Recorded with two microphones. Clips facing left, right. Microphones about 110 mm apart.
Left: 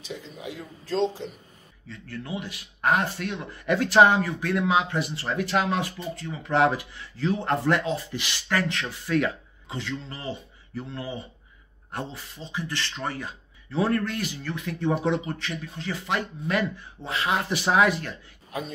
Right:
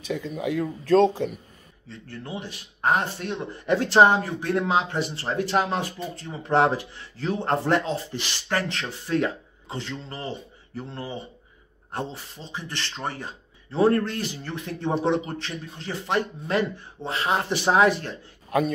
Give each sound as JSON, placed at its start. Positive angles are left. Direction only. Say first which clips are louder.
{"t": 0.0, "sound": "speech", "louder": "right 8 dB", "side_deg": -55}
{"t": 1.9, "sound": "speech", "louder": "left 1 dB", "side_deg": -30}